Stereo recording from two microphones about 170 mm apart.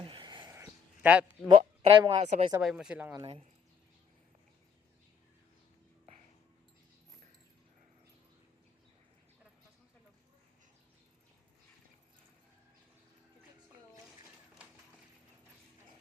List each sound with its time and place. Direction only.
0.0 s a sound: 30° right (ahead or behind); by 1.2 s 10° right (ahead or behind)
1.5 s speech: 30° right (ahead or behind)
2.6 s speech: 5° right (ahead or behind)